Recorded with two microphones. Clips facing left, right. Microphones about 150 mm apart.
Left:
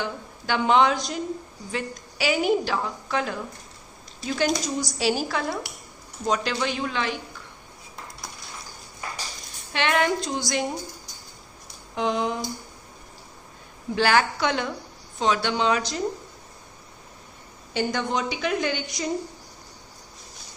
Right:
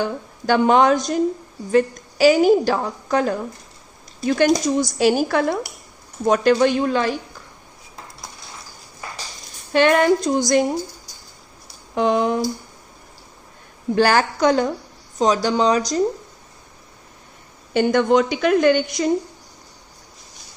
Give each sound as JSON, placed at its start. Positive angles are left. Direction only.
{"t": 0.0, "sound": "a woman's voice", "side_deg": -45}
{"t": 4.2, "sound": "speech", "side_deg": -55}
{"t": 9.7, "sound": "speech", "side_deg": -45}
{"t": 11.9, "sound": "speech", "side_deg": -50}
{"t": 13.9, "sound": "a woman's voice", "side_deg": -40}
{"t": 17.7, "sound": "a woman's voice", "side_deg": -55}